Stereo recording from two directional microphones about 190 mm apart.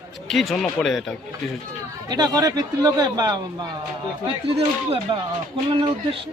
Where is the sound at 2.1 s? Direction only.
20° right (ahead or behind).